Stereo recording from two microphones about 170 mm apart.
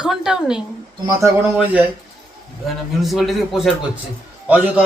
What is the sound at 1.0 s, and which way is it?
Speech, 20° right (ahead or behind).